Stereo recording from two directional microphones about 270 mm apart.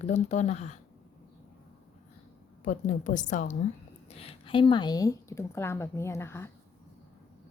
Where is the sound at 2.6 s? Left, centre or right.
Left; by 6.5 s centre.